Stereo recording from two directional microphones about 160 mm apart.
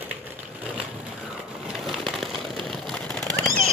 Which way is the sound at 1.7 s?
Centre (ahead or behind).